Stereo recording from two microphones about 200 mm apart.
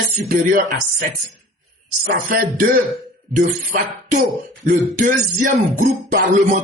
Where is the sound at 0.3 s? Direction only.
45° right (ahead or behind).